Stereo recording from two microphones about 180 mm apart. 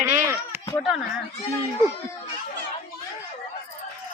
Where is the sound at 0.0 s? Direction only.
15° right (ahead or behind).